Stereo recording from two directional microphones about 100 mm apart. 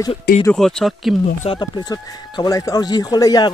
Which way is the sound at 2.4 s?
40° left (ahead or behind).